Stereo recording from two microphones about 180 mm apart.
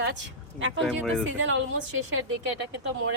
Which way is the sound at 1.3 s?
90° right.